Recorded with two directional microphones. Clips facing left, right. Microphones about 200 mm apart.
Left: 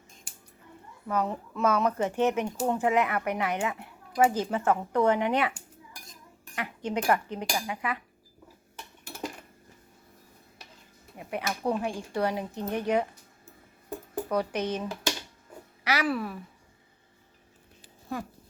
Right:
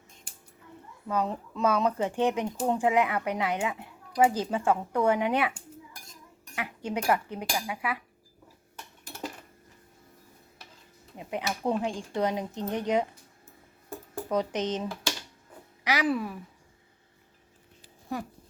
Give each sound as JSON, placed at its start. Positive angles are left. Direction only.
{"t": 1.0, "sound": "speech", "side_deg": -15}
{"t": 6.6, "sound": "speech", "side_deg": -10}
{"t": 11.2, "sound": "speech", "side_deg": -20}
{"t": 14.3, "sound": "speech", "side_deg": -20}